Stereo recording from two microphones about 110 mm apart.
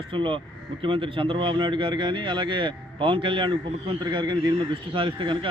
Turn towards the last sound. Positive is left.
turn(degrees=-50)  # may be behind; listen again after turning